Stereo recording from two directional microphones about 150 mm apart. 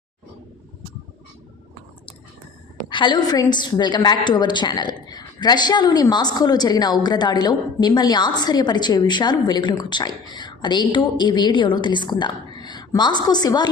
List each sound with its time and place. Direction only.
2.9 s a woman's voice: 30° left (ahead or behind)